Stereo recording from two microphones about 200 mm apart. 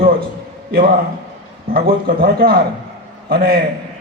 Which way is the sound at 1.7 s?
45° right (ahead or behind).